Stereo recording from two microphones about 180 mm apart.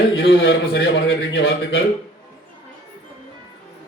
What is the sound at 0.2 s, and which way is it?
A man's voice, 65° left (ahead or behind).